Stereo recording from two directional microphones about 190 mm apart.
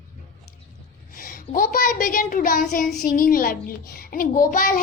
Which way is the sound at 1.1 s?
50° left (ahead or behind).